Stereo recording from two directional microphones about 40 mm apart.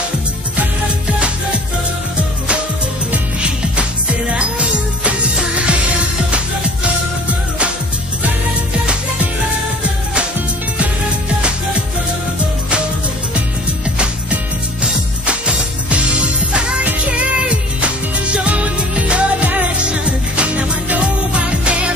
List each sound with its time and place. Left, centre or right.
2.1 s music: right
13.9 s music: right